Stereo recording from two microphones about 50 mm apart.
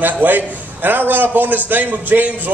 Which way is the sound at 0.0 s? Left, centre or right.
Right.